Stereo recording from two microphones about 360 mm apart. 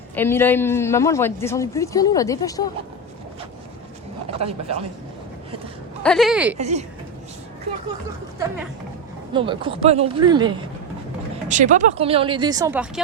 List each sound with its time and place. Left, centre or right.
0.2 s speech: centre
4.4 s speech: centre
6.0 s speech: centre
6.6 s speech: centre
9.3 s speech: centre